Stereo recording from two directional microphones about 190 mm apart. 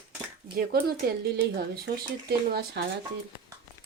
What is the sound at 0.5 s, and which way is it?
Speech, 55° right (ahead or behind).